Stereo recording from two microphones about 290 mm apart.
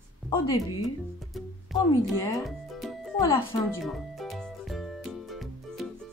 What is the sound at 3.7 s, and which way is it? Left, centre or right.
Music, centre.